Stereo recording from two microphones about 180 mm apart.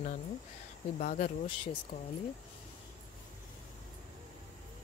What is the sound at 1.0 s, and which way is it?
Speech, 50° left (ahead or behind).